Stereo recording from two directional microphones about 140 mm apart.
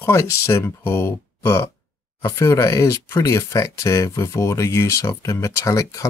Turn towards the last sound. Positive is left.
turn(degrees=25)  # may be behind; listen again after turning